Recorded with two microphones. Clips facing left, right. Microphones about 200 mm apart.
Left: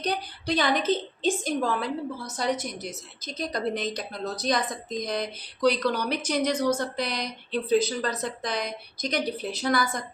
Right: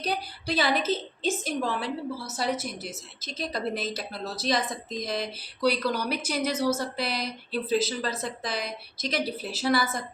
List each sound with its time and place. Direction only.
0.0 s speech: 5° right (ahead or behind)